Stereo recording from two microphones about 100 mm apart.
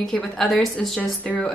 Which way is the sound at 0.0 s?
5° left (ahead or behind).